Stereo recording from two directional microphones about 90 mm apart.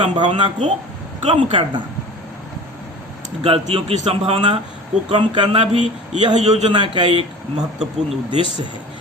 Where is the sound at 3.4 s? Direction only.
90° right.